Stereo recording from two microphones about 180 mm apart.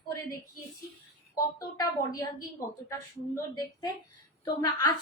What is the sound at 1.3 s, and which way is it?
A woman's voice, 20° left (ahead or behind).